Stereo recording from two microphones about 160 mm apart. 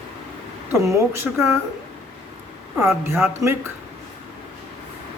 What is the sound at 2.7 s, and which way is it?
Speech, 15° right (ahead or behind).